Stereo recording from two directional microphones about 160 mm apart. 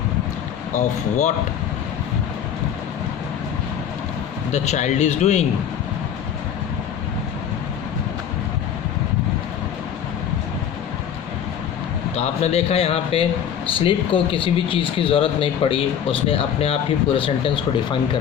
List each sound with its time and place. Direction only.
0.7 s a man's voice: 50° left (ahead or behind)
4.5 s a man's voice: 45° left (ahead or behind)
12.1 s speech: 40° left (ahead or behind)